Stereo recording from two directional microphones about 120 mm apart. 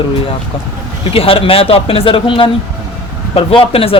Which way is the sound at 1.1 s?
50° left (ahead or behind).